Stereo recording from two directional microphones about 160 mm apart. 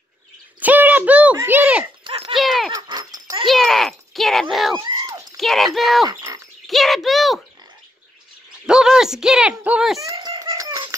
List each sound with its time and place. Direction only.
0.6 s a sound: 10° right (ahead or behind)
2.0 s clip-clop: 35° right (ahead or behind)
2.3 s dog: centre (ahead or behind)
2.7 s dog: 25° right (ahead or behind)
3.4 s a sound: centre (ahead or behind)
5.4 s speech: centre (ahead or behind)
6.0 s bird: 20° right (ahead or behind)
6.7 s speech: centre (ahead or behind)
8.6 s speech: 5° right (ahead or behind)
10.0 s a sound: 20° right (ahead or behind)
10.4 s rattle: 20° right (ahead or behind)